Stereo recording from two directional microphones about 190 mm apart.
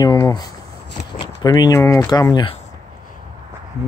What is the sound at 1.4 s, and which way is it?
Speech, 20° left (ahead or behind).